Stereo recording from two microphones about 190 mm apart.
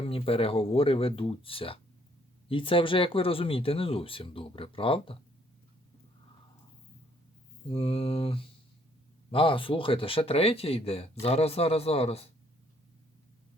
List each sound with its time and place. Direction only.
0.0 s speech: 30° left (ahead or behind)
7.7 s speech: 30° left (ahead or behind)